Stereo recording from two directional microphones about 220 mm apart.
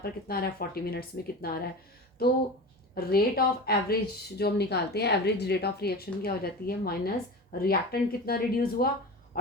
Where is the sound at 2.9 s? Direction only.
45° left (ahead or behind).